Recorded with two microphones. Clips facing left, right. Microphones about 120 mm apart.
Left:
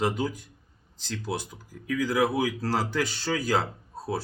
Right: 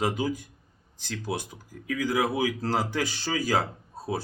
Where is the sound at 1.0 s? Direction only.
15° right (ahead or behind).